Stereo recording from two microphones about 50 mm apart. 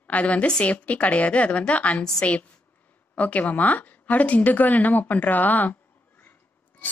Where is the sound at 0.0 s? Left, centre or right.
Left.